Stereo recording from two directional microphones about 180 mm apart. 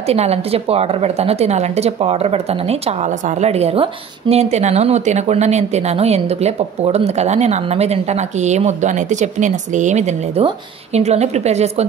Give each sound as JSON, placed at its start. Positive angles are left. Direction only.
{"t": 0.1, "sound": "a woman's voice", "side_deg": -35}